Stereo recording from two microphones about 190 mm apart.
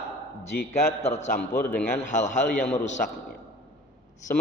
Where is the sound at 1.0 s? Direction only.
35° left (ahead or behind).